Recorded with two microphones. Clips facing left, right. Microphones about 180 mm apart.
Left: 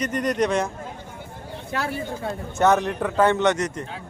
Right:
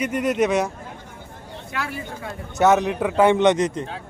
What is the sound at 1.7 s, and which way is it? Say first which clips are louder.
Speech: left 3 dB; 35° left (ahead or behind).